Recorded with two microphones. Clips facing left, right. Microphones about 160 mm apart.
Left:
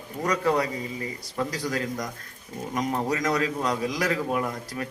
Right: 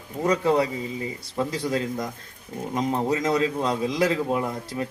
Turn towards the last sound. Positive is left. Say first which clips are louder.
# right 2 dB
turn(degrees=-25)  # may be behind; listen again after turning